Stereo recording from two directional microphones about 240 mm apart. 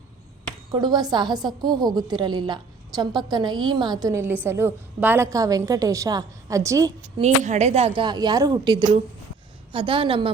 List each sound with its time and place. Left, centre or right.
0.7 s a woman's voice: centre
7.2 s speech: right